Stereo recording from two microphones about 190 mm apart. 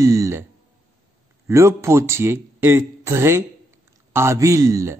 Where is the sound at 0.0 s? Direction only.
15° right (ahead or behind).